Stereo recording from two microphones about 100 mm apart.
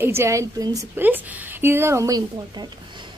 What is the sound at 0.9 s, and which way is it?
A woman's voice, 20° right (ahead or behind).